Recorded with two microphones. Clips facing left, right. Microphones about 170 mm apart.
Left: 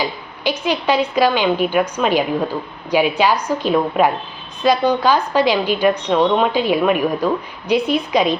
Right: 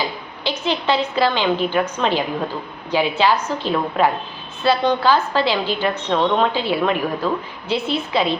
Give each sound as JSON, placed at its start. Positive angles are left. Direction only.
{"t": 0.0, "sound": "a woman's voice", "side_deg": 15}